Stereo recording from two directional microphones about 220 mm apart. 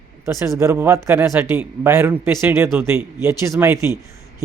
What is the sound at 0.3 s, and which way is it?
Speech, 15° right (ahead or behind).